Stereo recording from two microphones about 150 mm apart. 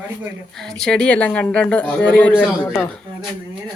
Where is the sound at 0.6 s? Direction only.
5° left (ahead or behind).